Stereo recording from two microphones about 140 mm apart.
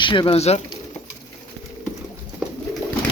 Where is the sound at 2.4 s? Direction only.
5° right (ahead or behind).